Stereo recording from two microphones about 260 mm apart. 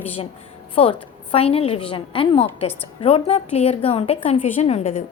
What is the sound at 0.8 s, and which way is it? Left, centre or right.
A woman's voice, left.